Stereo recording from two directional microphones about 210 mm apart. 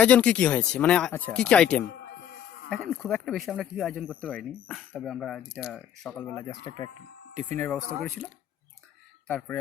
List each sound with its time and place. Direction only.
0.0 s speech: 5° left (ahead or behind)
7.5 s speech: 10° left (ahead or behind)
9.2 s speech: 10° left (ahead or behind)